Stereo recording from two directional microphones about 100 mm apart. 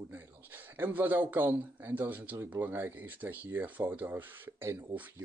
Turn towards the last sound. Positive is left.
turn(degrees=-20)  # may be behind; listen again after turning